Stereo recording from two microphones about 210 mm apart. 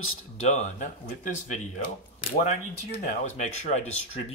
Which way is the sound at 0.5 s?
35° left (ahead or behind).